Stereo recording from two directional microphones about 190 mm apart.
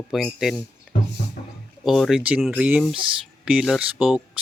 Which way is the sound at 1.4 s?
40° left (ahead or behind).